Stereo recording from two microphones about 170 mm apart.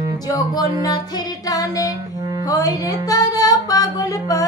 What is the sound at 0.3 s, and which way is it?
Music, 20° left (ahead or behind).